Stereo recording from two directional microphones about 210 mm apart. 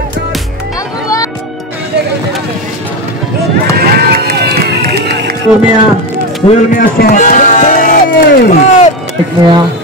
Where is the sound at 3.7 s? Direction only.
45° right (ahead or behind).